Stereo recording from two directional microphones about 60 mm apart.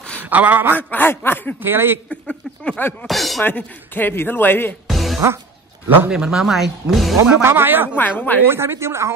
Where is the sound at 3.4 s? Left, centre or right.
Left.